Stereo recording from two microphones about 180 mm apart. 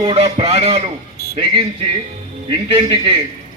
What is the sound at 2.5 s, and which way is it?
Speech, 30° right (ahead or behind).